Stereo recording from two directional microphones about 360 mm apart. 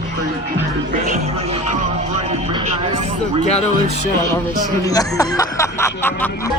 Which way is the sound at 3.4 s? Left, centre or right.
Centre.